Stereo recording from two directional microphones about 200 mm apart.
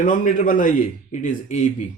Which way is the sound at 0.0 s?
40° left (ahead or behind).